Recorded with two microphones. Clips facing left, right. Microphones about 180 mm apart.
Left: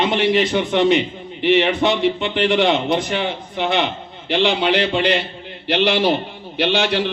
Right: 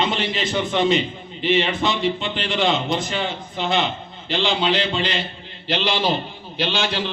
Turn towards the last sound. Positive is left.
turn(degrees=65)  # may be behind; listen again after turning